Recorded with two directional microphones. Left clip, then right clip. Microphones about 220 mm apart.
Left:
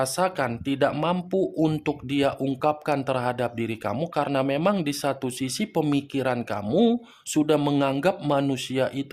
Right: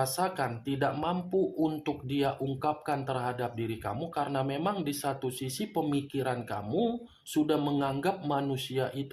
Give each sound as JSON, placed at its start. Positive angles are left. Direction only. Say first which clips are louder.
{"t": 0.0, "sound": "speech", "louder": "left 6 dB", "side_deg": 45}